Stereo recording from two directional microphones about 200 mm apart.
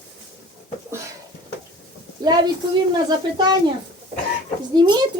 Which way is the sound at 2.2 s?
20° right (ahead or behind).